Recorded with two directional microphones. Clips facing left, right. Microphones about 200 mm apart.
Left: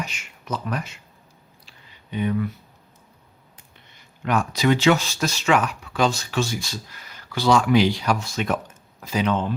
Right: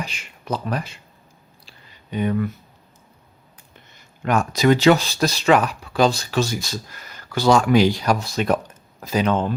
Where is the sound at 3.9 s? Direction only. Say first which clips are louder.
Right 2 dB; 45° right (ahead or behind).